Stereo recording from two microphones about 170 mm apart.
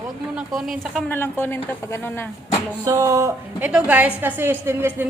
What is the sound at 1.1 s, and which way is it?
A woman's voice, 10° left (ahead or behind).